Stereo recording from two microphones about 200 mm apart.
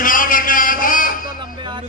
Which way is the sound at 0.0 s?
45° left (ahead or behind).